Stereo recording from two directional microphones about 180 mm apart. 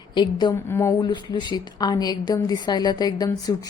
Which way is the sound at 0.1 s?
25° left (ahead or behind).